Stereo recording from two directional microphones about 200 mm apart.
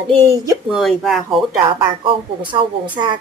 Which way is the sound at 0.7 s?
Centre (ahead or behind).